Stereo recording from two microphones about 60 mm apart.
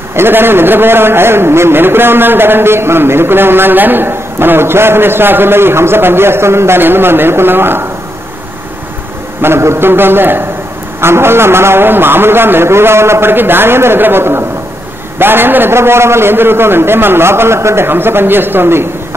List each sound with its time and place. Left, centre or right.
0.1 s a man's voice: right
9.4 s a man's voice: right